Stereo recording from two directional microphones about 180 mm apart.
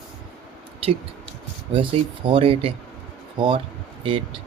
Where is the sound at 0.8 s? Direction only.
30° right (ahead or behind).